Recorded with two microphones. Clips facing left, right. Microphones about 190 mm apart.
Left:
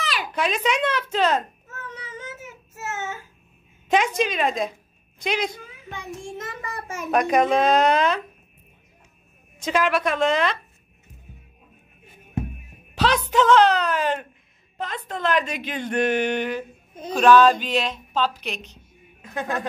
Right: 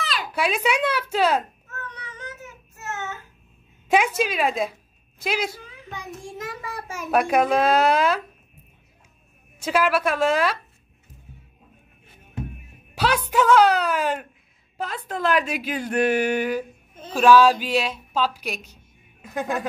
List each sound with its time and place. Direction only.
0.0 s a sound: 15° left (ahead or behind)
0.3 s a woman's voice: 10° right (ahead or behind)
1.7 s a sound: 15° left (ahead or behind)
3.9 s a woman's voice: 5° right (ahead or behind)
9.6 s a woman's voice: 5° right (ahead or behind)
12.9 s a woman's voice: 10° right (ahead or behind)